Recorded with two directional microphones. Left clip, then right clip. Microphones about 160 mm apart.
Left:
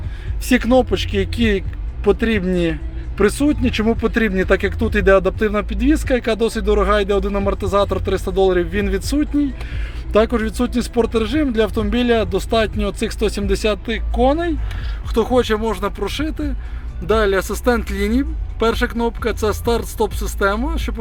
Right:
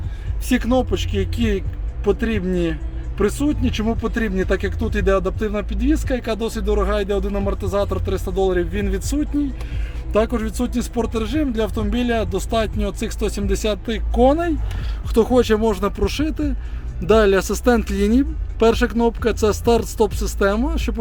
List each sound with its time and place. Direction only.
0.4 s speech: 10° left (ahead or behind)
14.2 s speech: 55° right (ahead or behind)
15.1 s speech: 25° right (ahead or behind)